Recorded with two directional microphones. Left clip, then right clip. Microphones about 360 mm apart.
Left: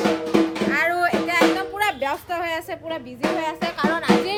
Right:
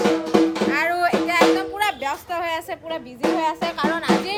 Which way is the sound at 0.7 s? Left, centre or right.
Centre.